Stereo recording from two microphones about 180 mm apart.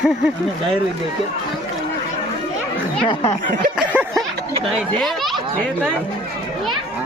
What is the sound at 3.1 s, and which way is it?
Speech, 25° left (ahead or behind).